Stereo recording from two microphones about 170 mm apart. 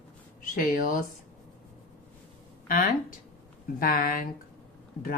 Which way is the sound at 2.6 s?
55° left (ahead or behind).